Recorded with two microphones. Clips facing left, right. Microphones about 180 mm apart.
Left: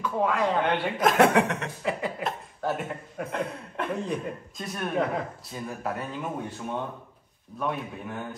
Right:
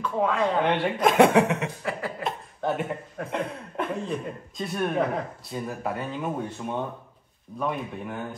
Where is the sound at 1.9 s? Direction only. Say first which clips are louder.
Left 5 dB; 20° left (ahead or behind).